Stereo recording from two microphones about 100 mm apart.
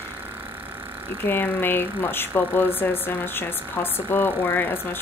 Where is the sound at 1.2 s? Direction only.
20° left (ahead or behind).